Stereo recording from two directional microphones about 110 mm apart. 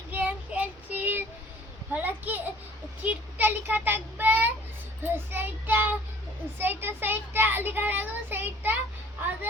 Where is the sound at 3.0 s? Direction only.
15° right (ahead or behind).